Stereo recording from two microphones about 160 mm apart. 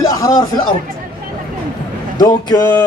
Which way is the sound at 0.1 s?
25° left (ahead or behind).